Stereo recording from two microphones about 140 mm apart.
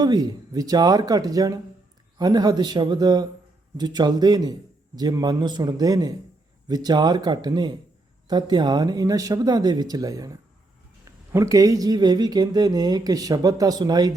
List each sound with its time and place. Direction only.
0.0 s speech: 30° right (ahead or behind)